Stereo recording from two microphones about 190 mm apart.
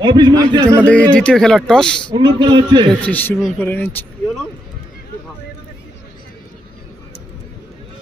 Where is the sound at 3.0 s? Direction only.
10° left (ahead or behind).